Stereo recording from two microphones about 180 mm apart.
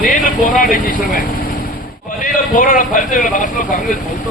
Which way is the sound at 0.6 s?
50° left (ahead or behind).